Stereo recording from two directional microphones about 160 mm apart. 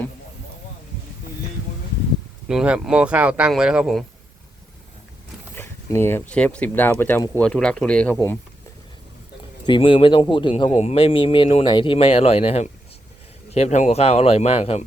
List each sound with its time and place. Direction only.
2.5 s speech: 5° right (ahead or behind)
5.5 s speech: 15° left (ahead or behind)
9.6 s speech: 30° left (ahead or behind)